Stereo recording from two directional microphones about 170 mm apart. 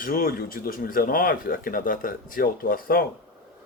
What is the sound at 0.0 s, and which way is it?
Speech, 55° left (ahead or behind).